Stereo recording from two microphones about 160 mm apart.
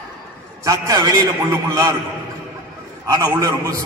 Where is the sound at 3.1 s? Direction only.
20° right (ahead or behind).